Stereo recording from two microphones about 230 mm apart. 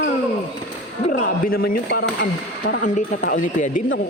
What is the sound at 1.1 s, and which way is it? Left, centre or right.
Speech, left.